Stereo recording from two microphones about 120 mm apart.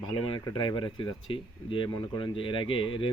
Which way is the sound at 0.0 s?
40° left (ahead or behind).